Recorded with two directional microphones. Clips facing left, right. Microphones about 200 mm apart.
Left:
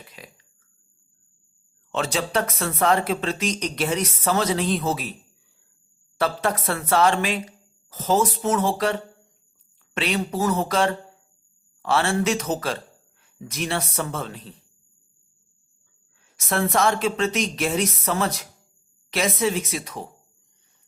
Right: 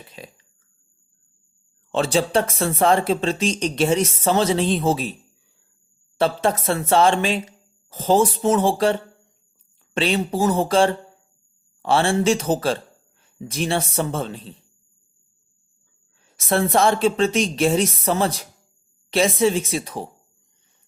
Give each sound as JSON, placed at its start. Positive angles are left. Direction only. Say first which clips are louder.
{"t": 0.2, "sound": "speech", "louder": "right 6 dB", "side_deg": -30}
{"t": 1.9, "sound": "speech", "louder": "right 5 dB", "side_deg": -30}
{"t": 6.1, "sound": "speech", "louder": "right 4 dB", "side_deg": -25}
{"t": 16.2, "sound": "speech", "louder": "right 4 dB", "side_deg": -30}